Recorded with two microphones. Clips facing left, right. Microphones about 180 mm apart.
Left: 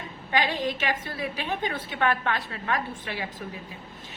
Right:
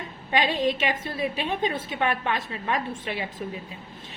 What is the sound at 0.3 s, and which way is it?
Speech, 20° right (ahead or behind).